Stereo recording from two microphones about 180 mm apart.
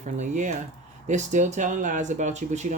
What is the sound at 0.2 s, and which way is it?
Speech, 45° right (ahead or behind).